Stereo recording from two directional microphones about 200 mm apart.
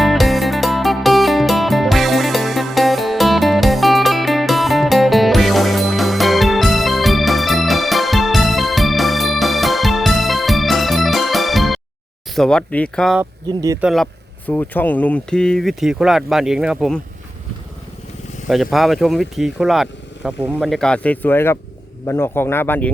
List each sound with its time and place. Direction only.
0.0 s music: centre (ahead or behind)
12.3 s speech: 5° left (ahead or behind)
13.5 s speech: 20° right (ahead or behind)
13.8 s speech: centre (ahead or behind)
18.4 s speech: centre (ahead or behind)